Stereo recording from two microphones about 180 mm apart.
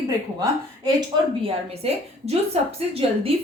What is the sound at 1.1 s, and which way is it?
A woman's voice, 30° right (ahead or behind).